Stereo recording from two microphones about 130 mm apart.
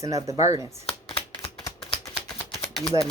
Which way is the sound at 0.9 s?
45° left (ahead or behind).